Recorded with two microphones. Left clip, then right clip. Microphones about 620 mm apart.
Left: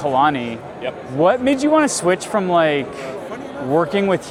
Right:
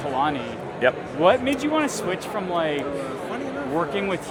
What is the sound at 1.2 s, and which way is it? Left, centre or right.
Speech, left.